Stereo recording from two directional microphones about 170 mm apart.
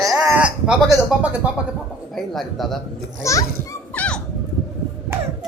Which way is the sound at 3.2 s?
20° left (ahead or behind).